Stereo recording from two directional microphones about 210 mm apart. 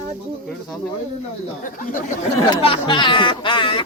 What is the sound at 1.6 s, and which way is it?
Speech, 40° left (ahead or behind).